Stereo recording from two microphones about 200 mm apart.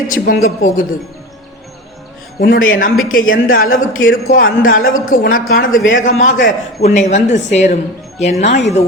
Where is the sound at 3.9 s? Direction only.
90° left.